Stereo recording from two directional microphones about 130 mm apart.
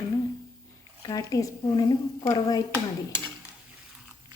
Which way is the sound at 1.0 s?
30° left (ahead or behind).